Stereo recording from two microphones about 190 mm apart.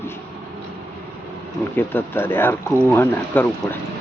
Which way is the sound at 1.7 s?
10° left (ahead or behind).